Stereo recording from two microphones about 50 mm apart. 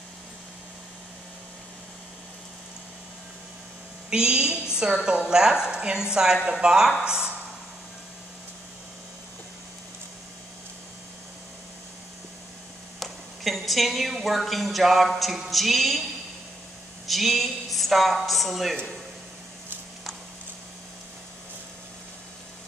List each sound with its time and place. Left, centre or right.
4.1 s a woman's voice: centre
13.0 s a woman's voice: centre
17.1 s a woman's voice: centre